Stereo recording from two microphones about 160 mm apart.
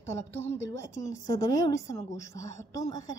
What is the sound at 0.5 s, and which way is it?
A woman's voice, 20° left (ahead or behind).